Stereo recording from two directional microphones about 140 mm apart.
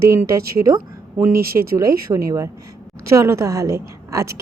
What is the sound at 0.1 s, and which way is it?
A woman's voice, 20° right (ahead or behind).